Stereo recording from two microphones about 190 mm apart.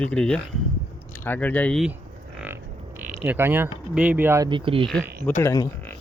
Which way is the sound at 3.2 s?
10° right (ahead or behind).